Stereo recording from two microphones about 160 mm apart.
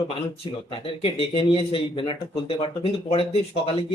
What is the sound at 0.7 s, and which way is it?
Speech, 35° left (ahead or behind).